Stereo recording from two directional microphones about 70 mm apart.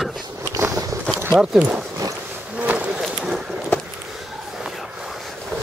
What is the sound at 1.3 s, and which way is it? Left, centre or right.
Speech, centre.